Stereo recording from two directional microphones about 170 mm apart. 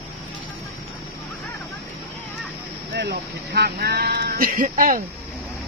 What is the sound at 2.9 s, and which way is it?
Speech, 75° right (ahead or behind).